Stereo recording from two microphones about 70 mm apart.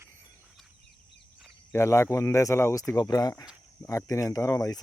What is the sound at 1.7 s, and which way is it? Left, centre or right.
Speech, left.